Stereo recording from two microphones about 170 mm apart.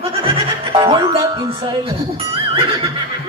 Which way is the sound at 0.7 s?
30° right (ahead or behind).